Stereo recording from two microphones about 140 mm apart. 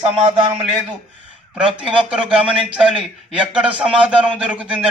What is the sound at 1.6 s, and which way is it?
A man's voice, 10° right (ahead or behind).